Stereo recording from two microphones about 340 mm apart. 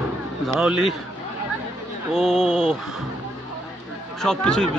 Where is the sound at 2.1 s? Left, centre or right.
Centre.